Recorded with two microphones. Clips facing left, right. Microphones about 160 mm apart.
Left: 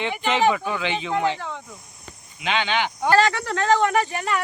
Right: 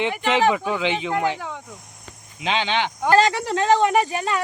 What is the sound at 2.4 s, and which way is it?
Speech, 30° right (ahead or behind).